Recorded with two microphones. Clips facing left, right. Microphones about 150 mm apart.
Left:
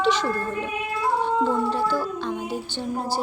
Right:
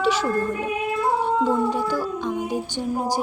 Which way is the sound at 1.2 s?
15° right (ahead or behind).